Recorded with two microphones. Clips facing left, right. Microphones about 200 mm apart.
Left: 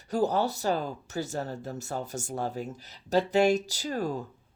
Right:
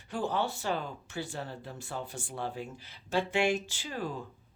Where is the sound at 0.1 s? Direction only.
40° left (ahead or behind).